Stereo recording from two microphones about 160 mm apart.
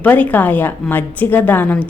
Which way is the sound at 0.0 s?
10° left (ahead or behind).